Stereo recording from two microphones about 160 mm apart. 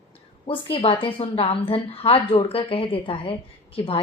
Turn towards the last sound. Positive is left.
turn(degrees=35)  # may be behind; listen again after turning